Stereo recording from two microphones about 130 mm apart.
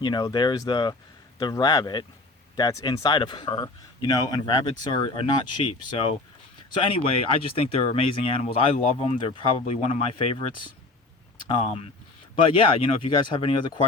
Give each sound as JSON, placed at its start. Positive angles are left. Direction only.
{"t": 0.0, "sound": "speech", "side_deg": 35}